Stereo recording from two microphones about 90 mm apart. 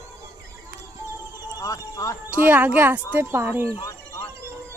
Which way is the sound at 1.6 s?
40° left (ahead or behind).